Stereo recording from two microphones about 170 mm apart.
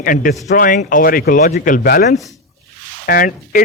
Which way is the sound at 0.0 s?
55° left (ahead or behind).